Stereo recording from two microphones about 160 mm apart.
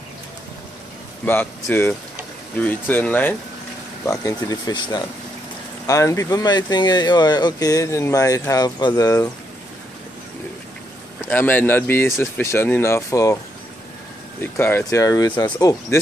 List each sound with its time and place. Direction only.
1.2 s speech: 10° left (ahead or behind)
4.0 s speech: 20° left (ahead or behind)
11.2 s speech: 10° left (ahead or behind)
14.4 s speech: 15° left (ahead or behind)